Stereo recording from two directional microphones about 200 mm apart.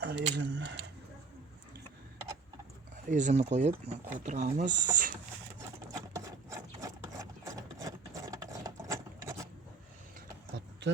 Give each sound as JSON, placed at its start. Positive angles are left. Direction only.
{"t": 0.0, "sound": "a sound", "side_deg": -55}
{"t": 3.1, "sound": "speech", "side_deg": -40}
{"t": 5.9, "sound": "horse", "side_deg": -15}